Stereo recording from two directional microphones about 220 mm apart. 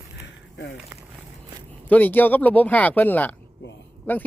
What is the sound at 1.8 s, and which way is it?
Speech, 10° left (ahead or behind).